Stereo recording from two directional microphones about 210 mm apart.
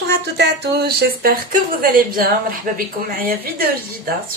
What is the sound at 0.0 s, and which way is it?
A woman's voice, 50° right (ahead or behind).